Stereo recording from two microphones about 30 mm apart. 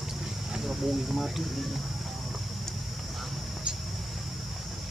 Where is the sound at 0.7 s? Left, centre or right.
Centre.